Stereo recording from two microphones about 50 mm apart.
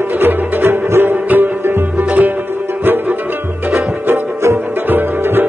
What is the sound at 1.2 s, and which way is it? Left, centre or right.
Music, right.